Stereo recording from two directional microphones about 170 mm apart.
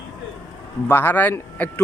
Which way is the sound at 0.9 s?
10° left (ahead or behind).